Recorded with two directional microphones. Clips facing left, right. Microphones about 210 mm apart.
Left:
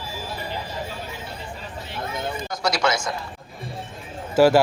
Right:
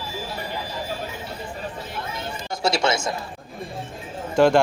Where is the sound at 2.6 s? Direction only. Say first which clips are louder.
Right 2 dB; 25° right (ahead or behind).